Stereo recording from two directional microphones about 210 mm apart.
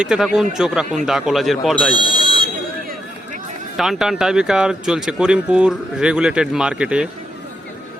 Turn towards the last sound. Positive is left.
turn(degrees=-5)  # may be behind; listen again after turning